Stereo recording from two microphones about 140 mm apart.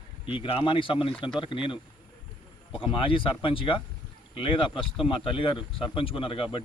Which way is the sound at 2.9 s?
40° left (ahead or behind).